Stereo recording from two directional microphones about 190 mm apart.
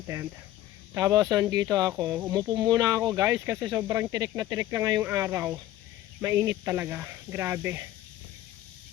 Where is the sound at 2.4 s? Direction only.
20° right (ahead or behind).